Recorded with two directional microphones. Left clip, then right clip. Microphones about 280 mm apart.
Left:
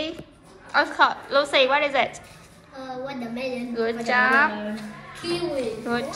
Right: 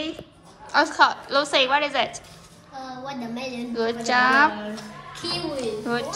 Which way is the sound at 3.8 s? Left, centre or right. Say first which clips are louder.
Right 1 dB; centre.